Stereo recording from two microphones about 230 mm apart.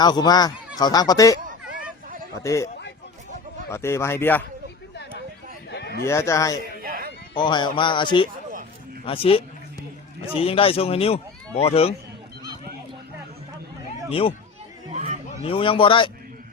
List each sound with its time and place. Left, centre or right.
0.0 s speech: centre
1.4 s hubbub: right
2.4 s speech: centre
3.7 s speech: centre
5.7 s a sound: left
6.1 s speech: centre
6.8 s a sound: right
7.3 s speech: centre
14.1 s speech: left
14.9 s a sound: right
15.3 s a man's voice: left